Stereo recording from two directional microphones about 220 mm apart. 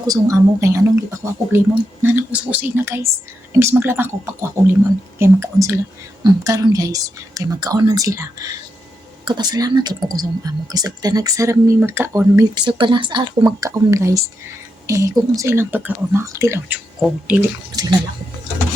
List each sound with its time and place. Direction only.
0.1 s speech: 15° right (ahead or behind)
17.7 s speech: 15° right (ahead or behind)